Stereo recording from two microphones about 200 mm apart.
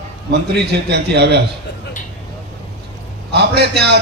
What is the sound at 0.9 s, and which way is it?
Speech, 55° right (ahead or behind).